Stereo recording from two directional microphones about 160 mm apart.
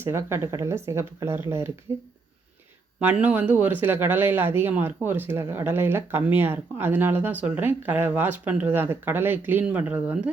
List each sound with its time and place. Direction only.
0.0 s speech: 15° right (ahead or behind)
3.0 s speech: 10° right (ahead or behind)